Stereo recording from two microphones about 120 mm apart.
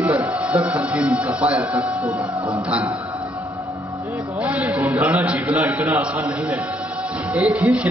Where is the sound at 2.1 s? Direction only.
50° right (ahead or behind).